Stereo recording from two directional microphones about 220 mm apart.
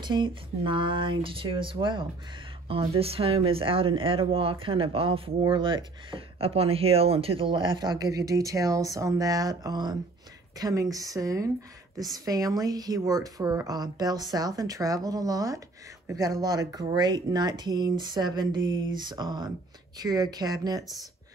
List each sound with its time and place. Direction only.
0.0 s a woman's voice: 20° right (ahead or behind)